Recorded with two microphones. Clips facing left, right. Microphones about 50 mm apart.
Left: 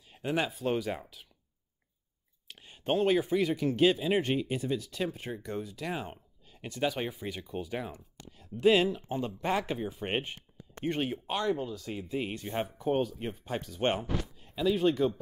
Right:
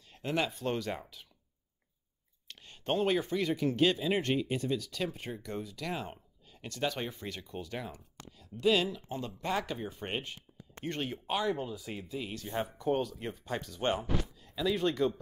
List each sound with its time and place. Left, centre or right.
0.1 s a sound: centre
0.5 s speech: centre
2.4 s a sound: centre
3.0 s speech: centre
8.4 s speech: left
9.8 s speech: centre
10.1 s a sound: left
10.9 s speech: centre
11.2 s speech: centre
12.1 s speech: left
12.8 s speech: centre
13.7 s a sound: left
14.6 s speech: centre